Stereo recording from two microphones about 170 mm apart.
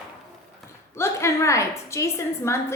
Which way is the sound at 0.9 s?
15° left (ahead or behind).